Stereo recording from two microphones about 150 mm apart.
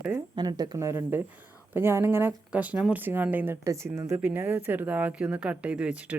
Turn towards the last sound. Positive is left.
turn(degrees=-10)  # may be behind; listen again after turning